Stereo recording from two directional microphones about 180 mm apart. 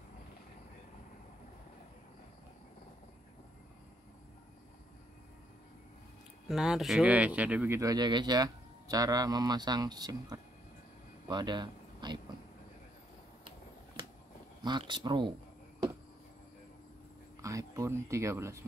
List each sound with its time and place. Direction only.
6.4 s speech: centre (ahead or behind); by 12.2 s 25° right (ahead or behind)
14.6 s speech: 25° right (ahead or behind)
17.4 s speech: 20° right (ahead or behind)